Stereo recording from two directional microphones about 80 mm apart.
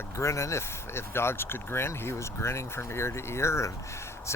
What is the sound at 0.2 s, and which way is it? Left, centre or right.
Speech, left.